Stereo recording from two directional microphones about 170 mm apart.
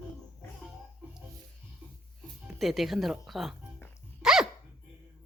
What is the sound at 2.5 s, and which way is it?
Speech, centre (ahead or behind).